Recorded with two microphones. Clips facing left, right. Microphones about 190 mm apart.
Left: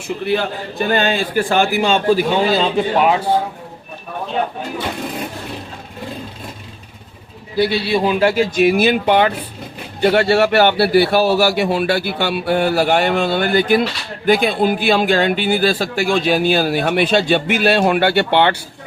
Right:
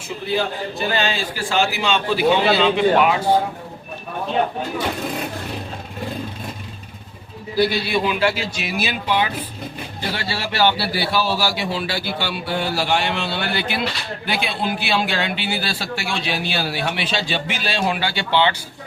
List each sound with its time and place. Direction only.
0.3 s a man's voice: 60° left (ahead or behind); by 2.8 s 40° left (ahead or behind)
7.5 s a man's voice: 25° left (ahead or behind); by 8.4 s 40° left (ahead or behind)
8.5 s a man's voice: 50° left (ahead or behind)